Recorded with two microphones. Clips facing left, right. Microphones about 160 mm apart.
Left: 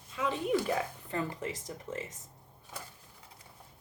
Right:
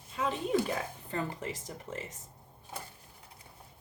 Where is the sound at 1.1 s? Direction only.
30° right (ahead or behind).